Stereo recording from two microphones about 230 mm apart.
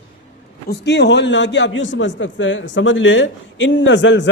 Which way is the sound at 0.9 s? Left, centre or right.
Left.